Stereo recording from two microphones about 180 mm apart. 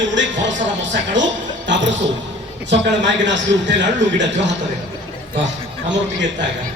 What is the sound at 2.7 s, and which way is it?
A man's voice, 85° right.